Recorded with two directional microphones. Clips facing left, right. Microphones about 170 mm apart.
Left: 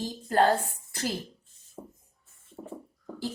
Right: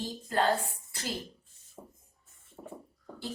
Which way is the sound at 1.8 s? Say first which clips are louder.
Left 5 dB; 25° left (ahead or behind).